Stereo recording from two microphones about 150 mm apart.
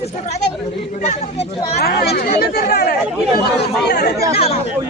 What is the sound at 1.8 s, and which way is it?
Speech, 90° left.